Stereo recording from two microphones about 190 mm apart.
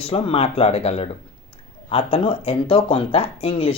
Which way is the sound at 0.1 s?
30° left (ahead or behind).